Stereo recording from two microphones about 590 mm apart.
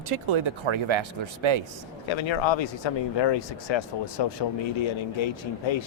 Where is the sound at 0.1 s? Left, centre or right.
Right.